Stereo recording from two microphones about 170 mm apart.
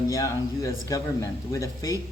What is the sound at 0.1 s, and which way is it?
Speech, 20° left (ahead or behind).